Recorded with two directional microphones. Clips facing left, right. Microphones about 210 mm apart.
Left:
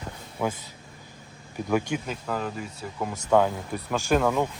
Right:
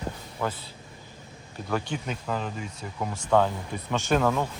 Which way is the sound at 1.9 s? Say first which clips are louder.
Left 1 dB; 5° left (ahead or behind).